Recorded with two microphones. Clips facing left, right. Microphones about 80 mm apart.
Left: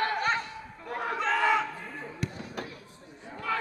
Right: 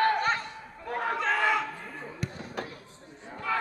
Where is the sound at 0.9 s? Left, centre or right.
Right.